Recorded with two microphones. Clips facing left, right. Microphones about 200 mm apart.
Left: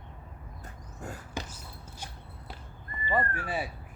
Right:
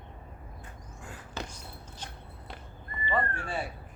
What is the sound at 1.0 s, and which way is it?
Whispering, 40° left (ahead or behind).